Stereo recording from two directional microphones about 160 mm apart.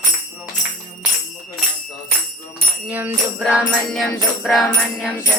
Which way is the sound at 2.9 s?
10° right (ahead or behind).